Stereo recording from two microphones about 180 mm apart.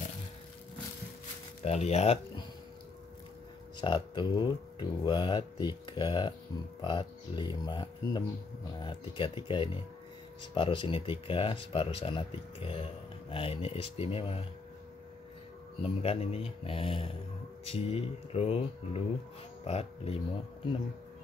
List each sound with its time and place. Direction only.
1.6 s speech: 35° left (ahead or behind)
3.8 s speech: 25° left (ahead or behind)
15.8 s speech: 30° left (ahead or behind)